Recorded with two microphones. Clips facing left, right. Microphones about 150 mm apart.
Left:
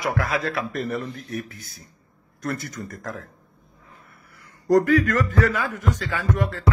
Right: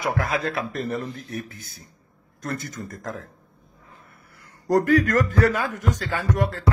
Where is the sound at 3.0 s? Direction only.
25° right (ahead or behind).